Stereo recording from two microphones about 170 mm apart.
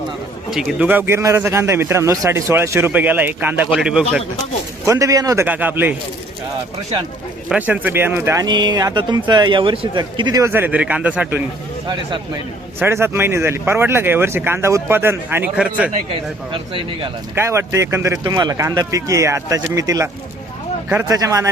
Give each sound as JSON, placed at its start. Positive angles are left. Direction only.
{"t": 0.5, "sound": "a man's voice", "side_deg": -5}
{"t": 4.9, "sound": "a man's voice", "side_deg": -20}
{"t": 7.5, "sound": "speech", "side_deg": -10}
{"t": 12.8, "sound": "a man's voice", "side_deg": -15}
{"t": 16.5, "sound": "speech", "side_deg": -30}
{"t": 17.3, "sound": "a man's voice", "side_deg": -15}